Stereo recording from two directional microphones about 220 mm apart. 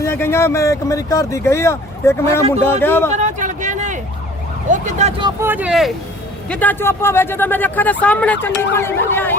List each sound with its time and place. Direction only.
0.0 s speech: 10° left (ahead or behind)
3.1 s a sound: 35° right (ahead or behind)
4.7 s speech: 30° right (ahead or behind)
5.2 s speech: 10° right (ahead or behind)
6.5 s speech: 10° left (ahead or behind)